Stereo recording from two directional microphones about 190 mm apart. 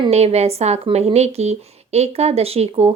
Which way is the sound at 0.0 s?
35° right (ahead or behind).